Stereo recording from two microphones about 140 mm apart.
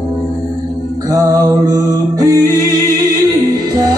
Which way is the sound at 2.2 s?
25° right (ahead or behind).